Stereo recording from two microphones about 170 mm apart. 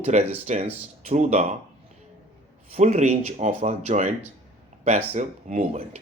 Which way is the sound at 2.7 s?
45° right (ahead or behind).